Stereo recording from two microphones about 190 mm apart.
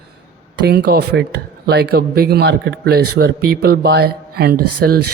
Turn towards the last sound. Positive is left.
turn(degrees=-55)  # may be behind; listen again after turning